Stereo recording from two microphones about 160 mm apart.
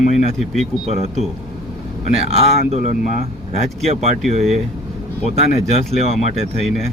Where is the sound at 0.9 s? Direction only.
40° right (ahead or behind).